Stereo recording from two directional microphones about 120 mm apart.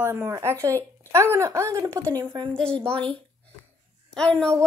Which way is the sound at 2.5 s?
10° left (ahead or behind).